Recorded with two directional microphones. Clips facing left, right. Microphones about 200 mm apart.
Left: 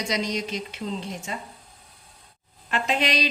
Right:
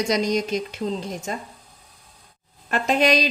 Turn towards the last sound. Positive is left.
turn(degrees=-45)  # may be behind; listen again after turning